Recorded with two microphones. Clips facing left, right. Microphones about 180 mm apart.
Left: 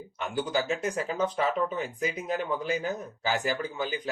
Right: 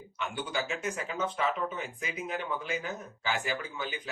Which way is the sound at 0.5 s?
40° left (ahead or behind).